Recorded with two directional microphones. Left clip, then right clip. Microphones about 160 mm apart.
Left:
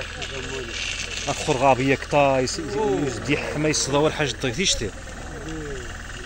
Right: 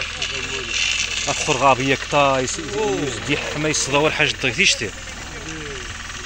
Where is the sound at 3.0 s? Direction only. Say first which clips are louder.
Right 2 dB; 15° left (ahead or behind).